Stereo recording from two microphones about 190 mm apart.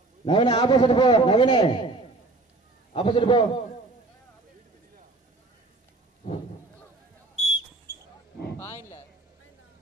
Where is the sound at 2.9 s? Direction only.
30° left (ahead or behind).